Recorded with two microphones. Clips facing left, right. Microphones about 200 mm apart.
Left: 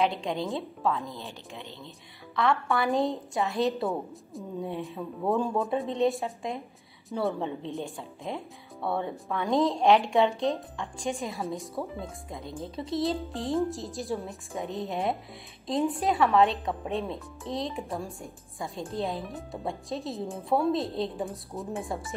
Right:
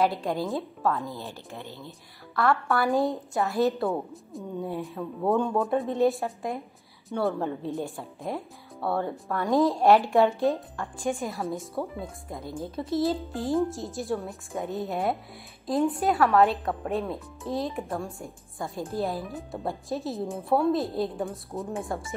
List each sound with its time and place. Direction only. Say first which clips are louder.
0.0 s speech: right 2 dB; centre (ahead or behind)
1.0 s a woman's voice: right 3 dB; 20° left (ahead or behind)
2.3 s speech: right 2 dB; centre (ahead or behind)